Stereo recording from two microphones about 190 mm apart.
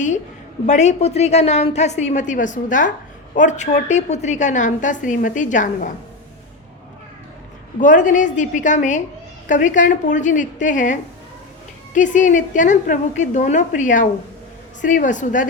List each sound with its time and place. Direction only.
0.7 s a woman's voice: 35° left (ahead or behind)
7.8 s a woman's voice: 40° left (ahead or behind)
11.9 s a woman's voice: 40° left (ahead or behind)